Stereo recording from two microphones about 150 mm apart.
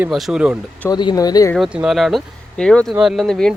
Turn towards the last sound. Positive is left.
turn(degrees=5)  # may be behind; listen again after turning